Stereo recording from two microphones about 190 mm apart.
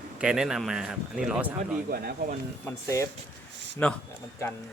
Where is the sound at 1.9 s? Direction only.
55° right (ahead or behind).